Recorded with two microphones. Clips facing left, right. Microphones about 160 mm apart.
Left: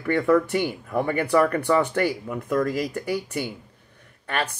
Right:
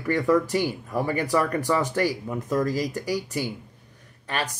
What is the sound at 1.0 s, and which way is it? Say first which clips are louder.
Speech: left 4 dB; 40° right (ahead or behind).